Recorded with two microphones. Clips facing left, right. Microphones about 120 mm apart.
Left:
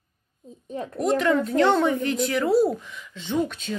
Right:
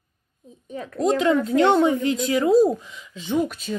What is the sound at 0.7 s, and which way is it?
Speech, 30° left (ahead or behind).